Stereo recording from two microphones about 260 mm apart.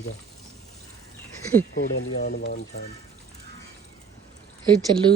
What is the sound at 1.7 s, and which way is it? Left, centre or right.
Speech, left.